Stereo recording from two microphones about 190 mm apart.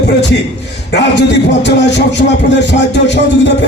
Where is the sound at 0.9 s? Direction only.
65° left (ahead or behind).